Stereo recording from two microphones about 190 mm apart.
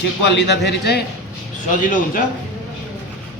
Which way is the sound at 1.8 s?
45° left (ahead or behind).